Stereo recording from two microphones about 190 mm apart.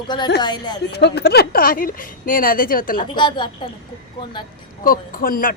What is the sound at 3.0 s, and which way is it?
Speech, 25° left (ahead or behind).